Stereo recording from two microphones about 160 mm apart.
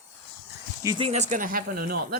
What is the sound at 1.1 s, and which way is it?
Speech, 50° right (ahead or behind).